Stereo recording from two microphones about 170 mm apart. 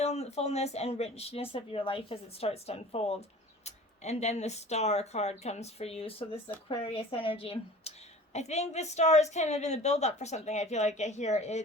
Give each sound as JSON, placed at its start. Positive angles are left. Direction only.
{"t": 0.0, "sound": "speech", "side_deg": 40}